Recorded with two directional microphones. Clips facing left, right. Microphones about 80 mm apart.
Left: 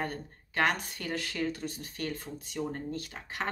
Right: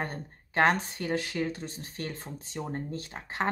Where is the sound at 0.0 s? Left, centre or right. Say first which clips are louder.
Even; right.